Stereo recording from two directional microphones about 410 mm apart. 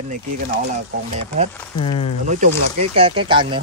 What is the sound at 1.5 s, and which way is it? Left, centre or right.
Speech, centre.